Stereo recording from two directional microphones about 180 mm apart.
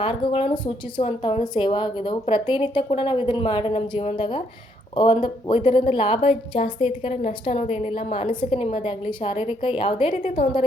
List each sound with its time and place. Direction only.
0.0 s a woman's voice: 25° left (ahead or behind)
10.2 s a woman's voice: 45° left (ahead or behind)